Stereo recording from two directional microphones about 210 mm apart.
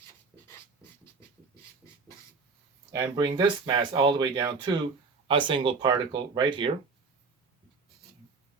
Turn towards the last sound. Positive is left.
turn(degrees=-20)  # may be behind; listen again after turning